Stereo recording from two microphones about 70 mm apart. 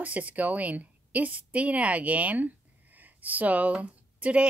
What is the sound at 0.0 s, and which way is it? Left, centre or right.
A woman's voice, right.